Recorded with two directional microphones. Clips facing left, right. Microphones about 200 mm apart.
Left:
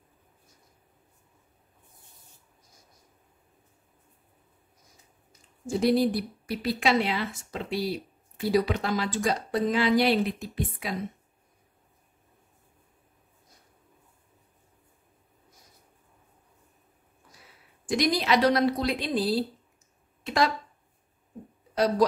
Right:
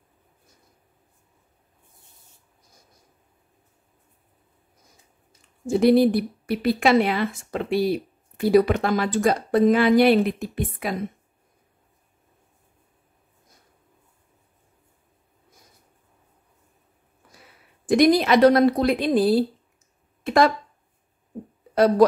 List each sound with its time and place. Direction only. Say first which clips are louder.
5.7 s speech: right 7 dB; 60° right (ahead or behind)
17.8 s a woman's voice: right 8 dB; 55° right (ahead or behind)
21.7 s speech: right 7 dB; 55° right (ahead or behind)